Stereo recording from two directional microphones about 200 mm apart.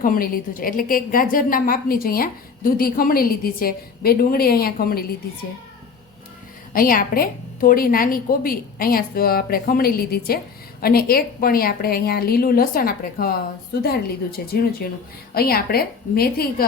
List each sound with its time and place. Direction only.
0.0 s a woman's voice: 45° left (ahead or behind)
6.7 s a woman's voice: 45° left (ahead or behind)